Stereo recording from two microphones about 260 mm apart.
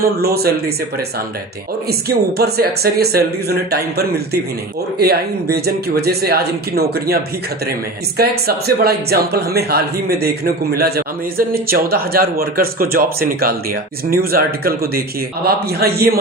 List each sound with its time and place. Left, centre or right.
0.0 s speech: right
1.9 s speech: right
8.2 s speech: right